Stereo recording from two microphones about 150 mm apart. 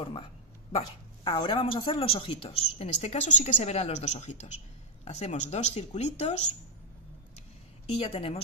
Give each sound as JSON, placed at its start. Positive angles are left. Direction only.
{"t": 0.7, "sound": "speech", "side_deg": 35}
{"t": 7.9, "sound": "a woman's voice", "side_deg": 40}